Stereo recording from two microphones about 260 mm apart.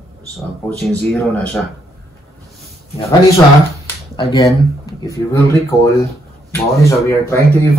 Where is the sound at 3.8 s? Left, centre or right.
Centre.